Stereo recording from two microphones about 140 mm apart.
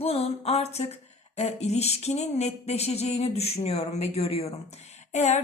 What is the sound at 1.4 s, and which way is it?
A woman's voice, 50° left (ahead or behind).